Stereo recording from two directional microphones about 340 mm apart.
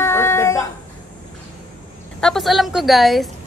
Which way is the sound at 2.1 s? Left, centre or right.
Centre.